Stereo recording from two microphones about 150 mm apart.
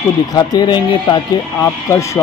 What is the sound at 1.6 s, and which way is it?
Speech, 20° left (ahead or behind).